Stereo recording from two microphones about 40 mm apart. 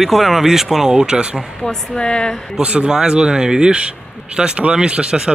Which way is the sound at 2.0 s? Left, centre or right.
Left.